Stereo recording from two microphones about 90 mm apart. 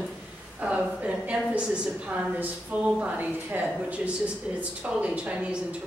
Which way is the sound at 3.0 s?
15° right (ahead or behind).